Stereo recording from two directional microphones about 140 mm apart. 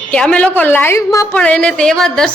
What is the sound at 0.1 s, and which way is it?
Speech, 5° left (ahead or behind).